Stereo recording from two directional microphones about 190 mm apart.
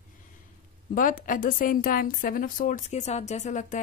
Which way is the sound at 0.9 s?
45° left (ahead or behind).